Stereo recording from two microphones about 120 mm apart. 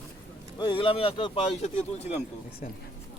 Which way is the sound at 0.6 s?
45° left (ahead or behind).